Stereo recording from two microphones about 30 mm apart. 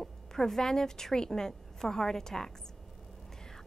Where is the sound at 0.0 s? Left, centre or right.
Centre.